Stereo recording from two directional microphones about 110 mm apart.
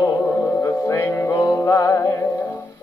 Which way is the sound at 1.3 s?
30° left (ahead or behind).